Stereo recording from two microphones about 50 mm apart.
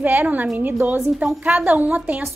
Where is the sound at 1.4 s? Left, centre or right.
Right.